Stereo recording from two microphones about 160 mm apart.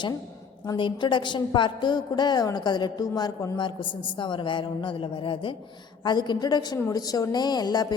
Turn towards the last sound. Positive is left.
turn(degrees=25)  # may be behind; listen again after turning